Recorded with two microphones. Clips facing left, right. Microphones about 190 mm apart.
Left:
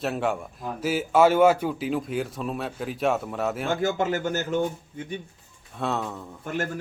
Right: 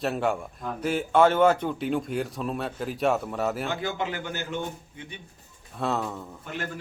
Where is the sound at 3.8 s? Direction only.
45° left (ahead or behind).